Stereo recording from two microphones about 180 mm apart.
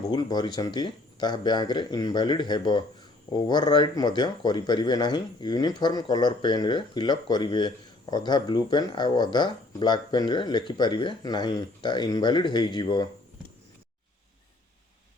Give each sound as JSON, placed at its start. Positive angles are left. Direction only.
{"t": 0.1, "sound": "speech", "side_deg": 25}